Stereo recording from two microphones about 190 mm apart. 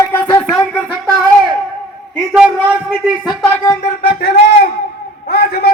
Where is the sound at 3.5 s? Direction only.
15° left (ahead or behind).